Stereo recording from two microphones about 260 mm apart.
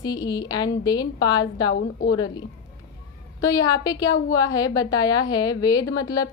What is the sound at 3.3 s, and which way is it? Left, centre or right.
A woman's voice, centre.